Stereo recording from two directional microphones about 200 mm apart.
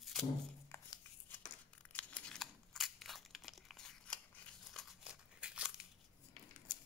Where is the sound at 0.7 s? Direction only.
15° left (ahead or behind).